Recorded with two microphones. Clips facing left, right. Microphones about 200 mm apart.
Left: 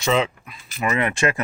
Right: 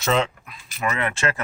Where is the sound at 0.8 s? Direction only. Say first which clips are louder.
Left 3 dB; 15° left (ahead or behind).